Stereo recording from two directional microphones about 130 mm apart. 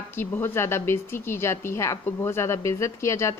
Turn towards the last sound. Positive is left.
turn(degrees=20)  # may be behind; listen again after turning